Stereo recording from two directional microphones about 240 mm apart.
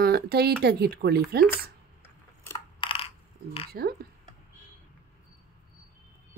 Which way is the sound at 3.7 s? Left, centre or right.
Right.